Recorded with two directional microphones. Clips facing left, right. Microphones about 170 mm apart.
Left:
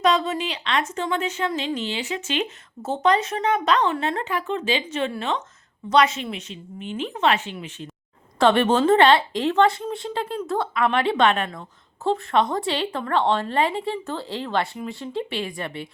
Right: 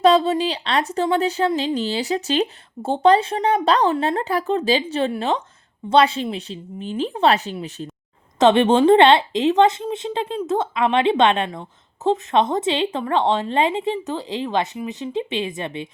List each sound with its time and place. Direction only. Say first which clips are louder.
0.0 s a woman's voice: right 6 dB; 30° right (ahead or behind)
3.9 s a woman's voice: right 4 dB; 25° right (ahead or behind)
4.2 s a woman's voice: right 5 dB; 35° right (ahead or behind)
8.4 s a woman's voice: right 4 dB; 20° right (ahead or behind)